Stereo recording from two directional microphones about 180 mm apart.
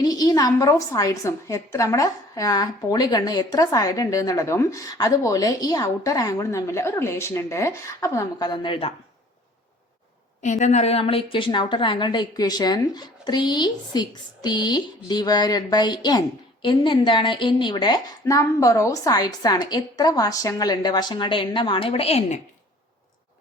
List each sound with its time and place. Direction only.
0.0 s a woman's voice: 20° left (ahead or behind)
10.4 s a woman's voice: 40° left (ahead or behind)